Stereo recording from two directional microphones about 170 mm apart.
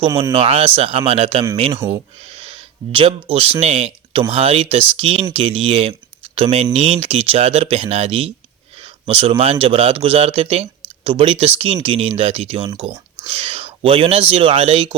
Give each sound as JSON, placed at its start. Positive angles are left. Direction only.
{"t": 0.3, "sound": "speech", "side_deg": -35}